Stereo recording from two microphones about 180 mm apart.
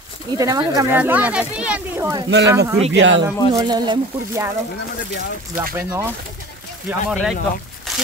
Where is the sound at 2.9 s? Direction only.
90° right.